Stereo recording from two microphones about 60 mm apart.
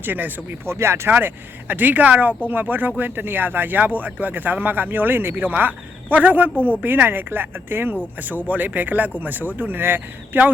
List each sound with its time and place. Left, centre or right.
0.0 s speech: right
0.6 s speech: right
1.1 s speech: right
6.5 s speech: left
6.8 s speech: right